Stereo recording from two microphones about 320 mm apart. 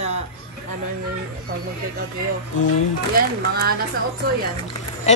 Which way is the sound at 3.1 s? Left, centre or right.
Right.